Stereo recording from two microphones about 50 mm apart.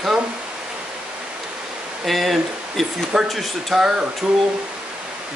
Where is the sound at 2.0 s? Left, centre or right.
Centre.